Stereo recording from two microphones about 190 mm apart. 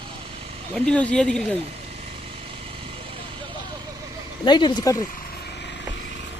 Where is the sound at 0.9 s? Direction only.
5° left (ahead or behind).